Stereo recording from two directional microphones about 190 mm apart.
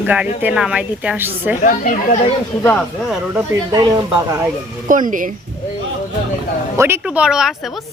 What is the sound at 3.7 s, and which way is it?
Speech, 20° right (ahead or behind).